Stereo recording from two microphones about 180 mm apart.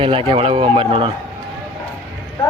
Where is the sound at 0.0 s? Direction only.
30° right (ahead or behind).